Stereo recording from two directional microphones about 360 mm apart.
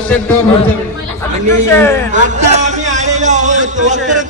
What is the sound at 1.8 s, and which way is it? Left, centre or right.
Speech, centre.